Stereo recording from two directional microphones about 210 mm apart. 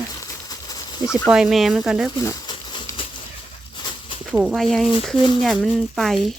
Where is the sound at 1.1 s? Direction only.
5° right (ahead or behind).